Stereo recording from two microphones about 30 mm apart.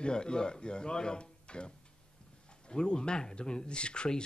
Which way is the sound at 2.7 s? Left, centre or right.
Left.